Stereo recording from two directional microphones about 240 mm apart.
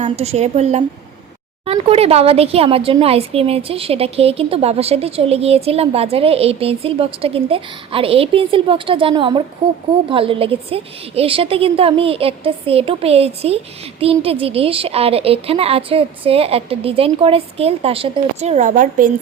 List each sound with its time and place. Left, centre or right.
0.0 s speech: right